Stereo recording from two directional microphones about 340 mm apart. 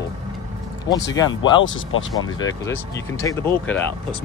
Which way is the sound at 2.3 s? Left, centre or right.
Centre.